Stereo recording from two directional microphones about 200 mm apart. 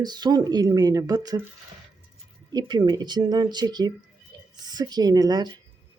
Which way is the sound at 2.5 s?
20° right (ahead or behind).